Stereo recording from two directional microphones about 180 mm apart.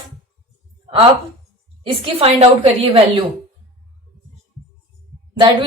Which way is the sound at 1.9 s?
30° right (ahead or behind).